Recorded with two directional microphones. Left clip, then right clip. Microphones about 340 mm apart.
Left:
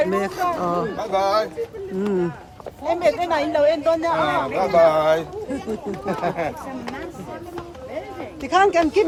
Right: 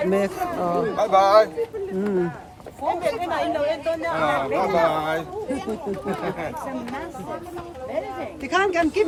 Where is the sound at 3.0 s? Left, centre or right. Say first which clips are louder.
Left 7 dB; left.